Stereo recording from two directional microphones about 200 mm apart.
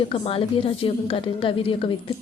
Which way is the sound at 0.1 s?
25° left (ahead or behind).